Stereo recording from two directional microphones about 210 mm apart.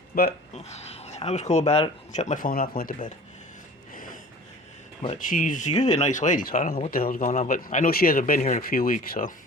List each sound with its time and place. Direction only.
0.1 s speech: 45° left (ahead or behind)
0.5 s speech: 30° left (ahead or behind)
3.9 s snort: 40° left (ahead or behind)
5.0 s speech: 35° left (ahead or behind)